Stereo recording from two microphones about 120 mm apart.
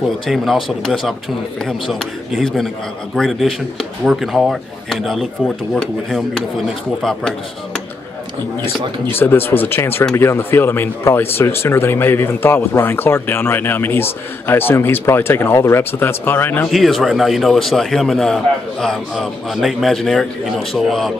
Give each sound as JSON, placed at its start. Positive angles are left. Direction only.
{"t": 0.3, "sound": "a man's voice", "side_deg": 0}
{"t": 9.1, "sound": "speech", "side_deg": 20}
{"t": 16.7, "sound": "a man's voice", "side_deg": 0}